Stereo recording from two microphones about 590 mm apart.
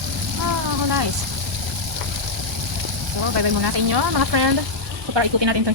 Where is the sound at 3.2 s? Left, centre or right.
Right.